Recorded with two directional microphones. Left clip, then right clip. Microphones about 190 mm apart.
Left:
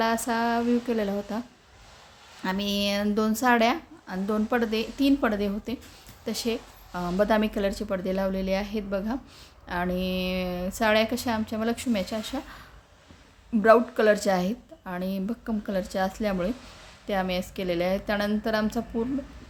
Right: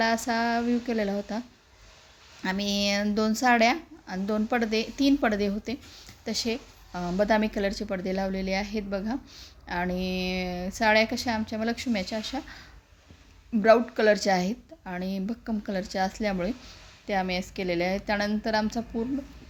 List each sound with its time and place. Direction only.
0.0 s a woman's voice: centre (ahead or behind)
2.4 s a woman's voice: centre (ahead or behind)